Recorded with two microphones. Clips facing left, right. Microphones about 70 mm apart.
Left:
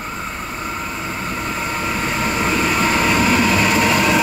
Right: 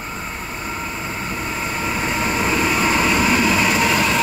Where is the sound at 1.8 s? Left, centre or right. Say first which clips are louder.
Even; centre.